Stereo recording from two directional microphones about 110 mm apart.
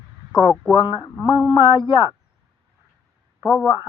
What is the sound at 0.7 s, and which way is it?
Speech, 45° left (ahead or behind).